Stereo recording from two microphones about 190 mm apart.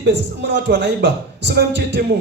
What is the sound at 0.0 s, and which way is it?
A man's voice, 65° right (ahead or behind).